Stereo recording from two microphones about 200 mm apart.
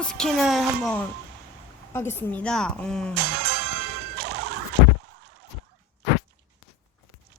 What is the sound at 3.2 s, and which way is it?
Music, 55° right (ahead or behind).